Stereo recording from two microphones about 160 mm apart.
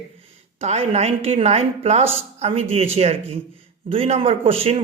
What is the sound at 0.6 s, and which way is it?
Speech, 40° right (ahead or behind).